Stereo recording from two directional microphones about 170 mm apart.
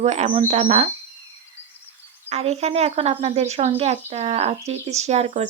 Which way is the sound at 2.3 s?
40° right (ahead or behind).